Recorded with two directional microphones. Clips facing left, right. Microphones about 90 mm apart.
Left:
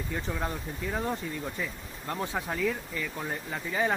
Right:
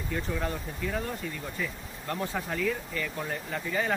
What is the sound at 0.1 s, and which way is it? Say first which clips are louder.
Speech: right 3 dB; 15° left (ahead or behind).